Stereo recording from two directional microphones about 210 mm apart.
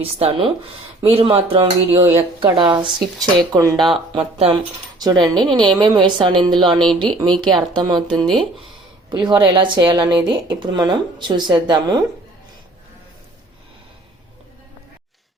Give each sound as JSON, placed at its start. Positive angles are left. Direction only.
{"t": 0.0, "sound": "speech", "side_deg": -25}
{"t": 5.2, "sound": "a woman's voice", "side_deg": 5}
{"t": 5.7, "sound": "speech", "side_deg": -20}
{"t": 6.7, "sound": "a woman's voice", "side_deg": 0}
{"t": 7.4, "sound": "speech", "side_deg": -20}
{"t": 8.3, "sound": "a woman's voice", "side_deg": 0}
{"t": 9.0, "sound": "speech", "side_deg": -20}